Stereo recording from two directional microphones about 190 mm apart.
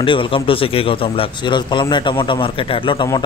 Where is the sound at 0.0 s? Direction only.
25° left (ahead or behind).